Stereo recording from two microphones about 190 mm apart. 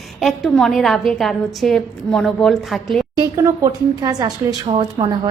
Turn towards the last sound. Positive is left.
turn(degrees=-20)  # may be behind; listen again after turning